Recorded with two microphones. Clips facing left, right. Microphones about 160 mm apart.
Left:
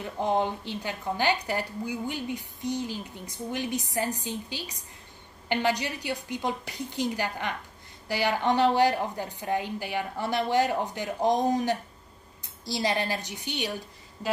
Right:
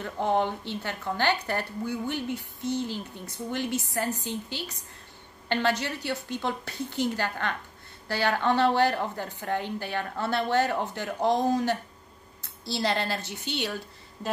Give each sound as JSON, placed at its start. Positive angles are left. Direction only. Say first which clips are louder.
{"t": 0.0, "sound": "a woman's voice", "louder": "right 1 dB", "side_deg": 15}